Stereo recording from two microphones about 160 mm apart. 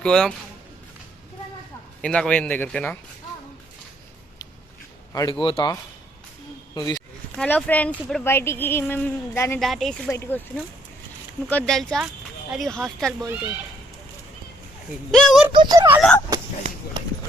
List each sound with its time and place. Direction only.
0.0 s speech: 5° left (ahead or behind)
2.0 s speech: 5° left (ahead or behind)
5.1 s speech: 30° left (ahead or behind)
6.7 s speech: 25° left (ahead or behind)
7.3 s speech: 10° left (ahead or behind)
9.6 s speech: centre (ahead or behind)
10.1 s speech: 15° left (ahead or behind)
11.4 s speech: 5° left (ahead or behind)
15.1 s speech: centre (ahead or behind)
15.5 s speech: 30° right (ahead or behind)
16.0 s speech: 5° left (ahead or behind)